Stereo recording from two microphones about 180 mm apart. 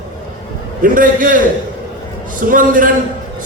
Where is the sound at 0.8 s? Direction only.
50° right (ahead or behind).